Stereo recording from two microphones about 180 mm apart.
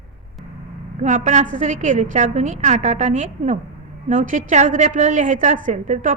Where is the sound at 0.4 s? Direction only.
Centre (ahead or behind).